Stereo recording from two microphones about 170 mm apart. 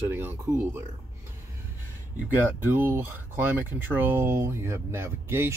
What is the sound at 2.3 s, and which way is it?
Speech, 10° right (ahead or behind).